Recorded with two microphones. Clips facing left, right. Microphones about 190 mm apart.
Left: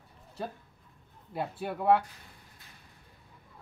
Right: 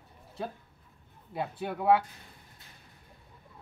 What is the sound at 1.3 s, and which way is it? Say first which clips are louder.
Speech: even; centre (ahead or behind).